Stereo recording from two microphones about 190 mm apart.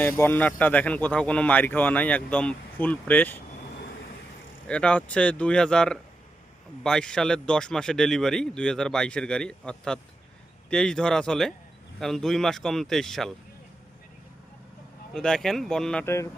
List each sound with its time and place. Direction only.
0.0 s speech: 10° left (ahead or behind)
4.7 s speech: 5° left (ahead or behind)
15.1 s speech: 5° left (ahead or behind)